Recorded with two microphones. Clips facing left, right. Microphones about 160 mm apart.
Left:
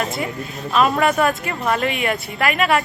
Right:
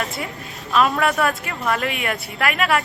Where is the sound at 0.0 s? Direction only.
Centre (ahead or behind).